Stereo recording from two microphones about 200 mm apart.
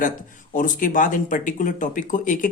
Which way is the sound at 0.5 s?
40° left (ahead or behind).